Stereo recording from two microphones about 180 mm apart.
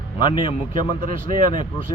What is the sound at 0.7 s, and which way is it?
Speech, 50° right (ahead or behind).